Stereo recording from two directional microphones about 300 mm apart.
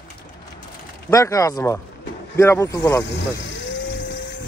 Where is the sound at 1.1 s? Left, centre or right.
Centre.